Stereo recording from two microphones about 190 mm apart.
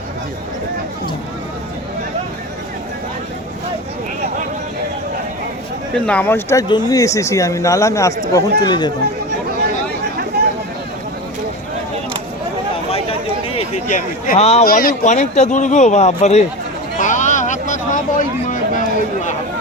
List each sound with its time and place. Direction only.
5.9 s speech: 5° left (ahead or behind); by 8.9 s 20° left (ahead or behind)
12.9 s a sound: 30° left (ahead or behind)
14.6 s speech: 50° left (ahead or behind); by 16.5 s 35° left (ahead or behind)
17.0 s vehicle: 40° left (ahead or behind)